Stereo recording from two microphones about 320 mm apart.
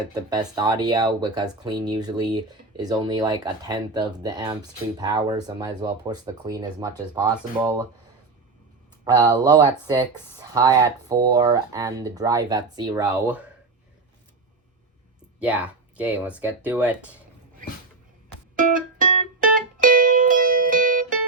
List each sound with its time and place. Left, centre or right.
0.1 s speech: centre
9.0 s speech: centre
15.4 s speech: centre
18.5 s music: right